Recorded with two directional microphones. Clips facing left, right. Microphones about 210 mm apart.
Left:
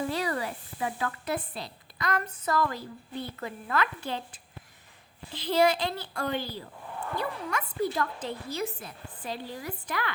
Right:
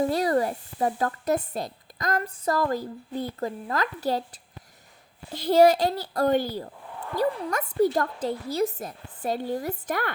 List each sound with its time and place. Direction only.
0.0 s a woman's voice: 40° right (ahead or behind)